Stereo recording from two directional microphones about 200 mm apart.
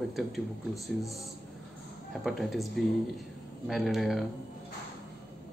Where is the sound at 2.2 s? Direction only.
Centre (ahead or behind).